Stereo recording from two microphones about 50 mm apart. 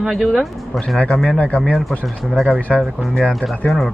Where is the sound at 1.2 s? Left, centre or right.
Left.